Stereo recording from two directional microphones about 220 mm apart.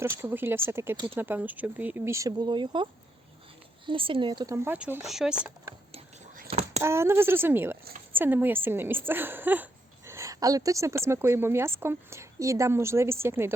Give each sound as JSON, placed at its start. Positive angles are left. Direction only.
{"t": 0.0, "sound": "a woman's voice", "side_deg": -10}
{"t": 5.9, "sound": "whispering", "side_deg": -30}
{"t": 6.8, "sound": "a woman's voice", "side_deg": -10}